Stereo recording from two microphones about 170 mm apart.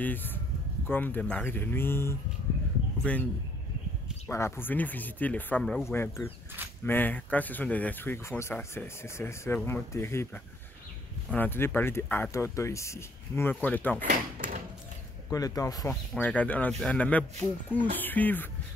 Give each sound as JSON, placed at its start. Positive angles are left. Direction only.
{"t": 0.0, "sound": "a man's voice", "side_deg": 10}
{"t": 4.3, "sound": "speech", "side_deg": 15}
{"t": 5.9, "sound": "speech", "side_deg": 15}
{"t": 15.2, "sound": "speech", "side_deg": 20}
{"t": 15.9, "sound": "speech", "side_deg": 10}